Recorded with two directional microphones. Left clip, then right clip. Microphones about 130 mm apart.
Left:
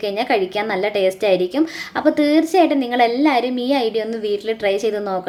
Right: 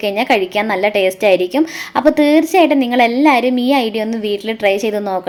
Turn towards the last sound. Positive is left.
turn(degrees=-30)  # may be behind; listen again after turning